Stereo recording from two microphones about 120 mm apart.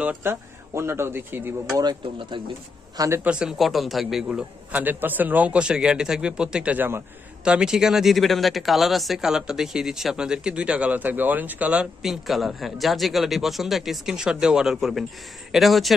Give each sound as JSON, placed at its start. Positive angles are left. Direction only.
{"t": 0.2, "sound": "speech", "side_deg": -20}
{"t": 1.8, "sound": "speech", "side_deg": -40}
{"t": 3.3, "sound": "a man's voice", "side_deg": -5}